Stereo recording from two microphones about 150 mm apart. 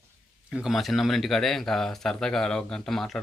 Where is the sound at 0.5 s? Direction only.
Centre (ahead or behind).